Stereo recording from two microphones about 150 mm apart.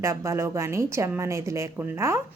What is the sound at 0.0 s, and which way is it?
A woman's voice, 20° right (ahead or behind).